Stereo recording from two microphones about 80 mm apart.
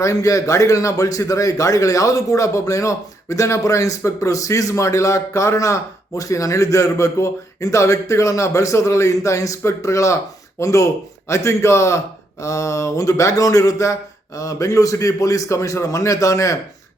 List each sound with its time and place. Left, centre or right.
0.0 s a man's voice: left